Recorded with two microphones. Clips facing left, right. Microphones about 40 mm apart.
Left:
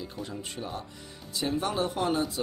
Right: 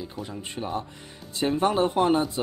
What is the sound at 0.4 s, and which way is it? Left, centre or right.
Speech, right.